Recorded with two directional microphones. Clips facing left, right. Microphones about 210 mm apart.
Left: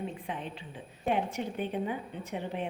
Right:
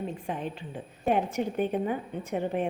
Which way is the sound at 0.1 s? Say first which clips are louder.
Right 5 dB; 45° right (ahead or behind).